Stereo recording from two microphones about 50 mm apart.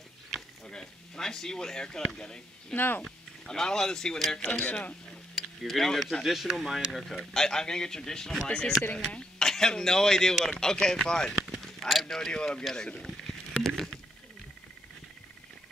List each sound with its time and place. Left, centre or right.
0.7 s speech: centre
2.7 s speech: left
3.0 s speech: centre
4.5 s speech: left
5.3 s a sound: centre
6.2 s a man's voice: centre
11.4 s a sound: centre
11.9 s speech: centre
12.3 s speech: centre
13.0 s a sound: centre